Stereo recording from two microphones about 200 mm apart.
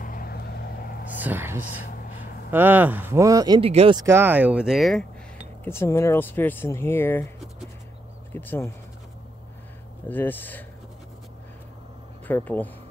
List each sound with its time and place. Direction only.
0.0 s vehicle: 45° left (ahead or behind)
1.0 s a sound: 10° right (ahead or behind)
2.5 s speech: 10° right (ahead or behind); by 4.0 s 30° right (ahead or behind)
4.0 s speech: 10° right (ahead or behind)
5.6 s speech: 10° left (ahead or behind)
8.3 s speech: 10° left (ahead or behind)
10.0 s speech: 10° left (ahead or behind)
12.3 s speech: 10° left (ahead or behind)